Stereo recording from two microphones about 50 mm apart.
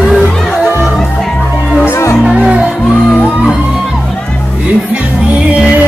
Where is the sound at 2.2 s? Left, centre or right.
Right.